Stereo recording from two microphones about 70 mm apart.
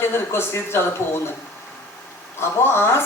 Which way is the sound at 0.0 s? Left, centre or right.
Left.